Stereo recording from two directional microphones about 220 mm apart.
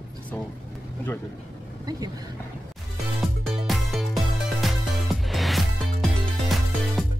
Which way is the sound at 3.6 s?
Centre (ahead or behind).